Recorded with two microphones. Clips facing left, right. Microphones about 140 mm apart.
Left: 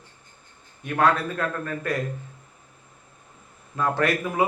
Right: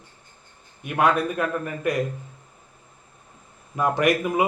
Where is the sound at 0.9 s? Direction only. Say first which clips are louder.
Right 1 dB; 15° right (ahead or behind).